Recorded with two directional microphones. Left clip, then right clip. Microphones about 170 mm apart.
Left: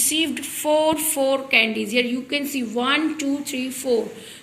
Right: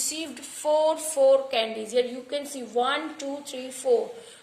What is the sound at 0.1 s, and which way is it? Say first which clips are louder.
A woman's voice: left 12 dB; 30° right (ahead or behind).